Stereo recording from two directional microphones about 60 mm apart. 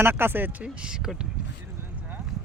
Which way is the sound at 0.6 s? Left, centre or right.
Centre.